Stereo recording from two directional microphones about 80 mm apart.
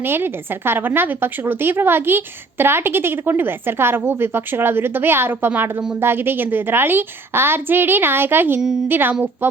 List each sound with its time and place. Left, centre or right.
0.0 s a woman's voice: right